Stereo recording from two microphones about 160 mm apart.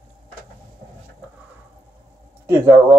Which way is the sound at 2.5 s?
20° right (ahead or behind).